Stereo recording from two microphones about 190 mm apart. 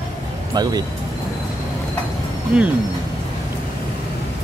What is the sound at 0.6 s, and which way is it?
Speech, 20° right (ahead or behind).